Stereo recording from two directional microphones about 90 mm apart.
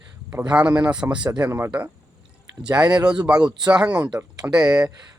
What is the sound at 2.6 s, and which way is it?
Speech, 50° right (ahead or behind).